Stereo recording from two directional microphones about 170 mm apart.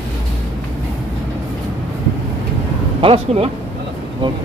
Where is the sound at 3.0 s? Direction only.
35° right (ahead or behind).